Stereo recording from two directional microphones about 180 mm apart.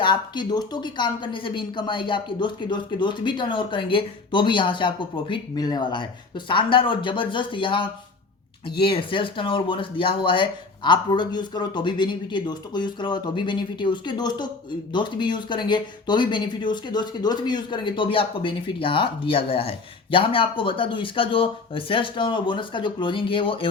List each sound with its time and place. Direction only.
0.0 s speech: 25° left (ahead or behind)